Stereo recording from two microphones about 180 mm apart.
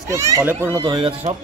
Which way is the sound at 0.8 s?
25° right (ahead or behind).